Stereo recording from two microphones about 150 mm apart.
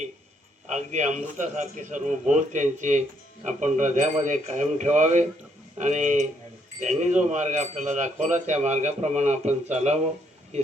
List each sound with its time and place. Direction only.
0.7 s a man's voice: 50° right (ahead or behind)